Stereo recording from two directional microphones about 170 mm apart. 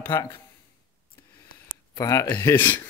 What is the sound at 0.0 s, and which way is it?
Speech, 15° left (ahead or behind).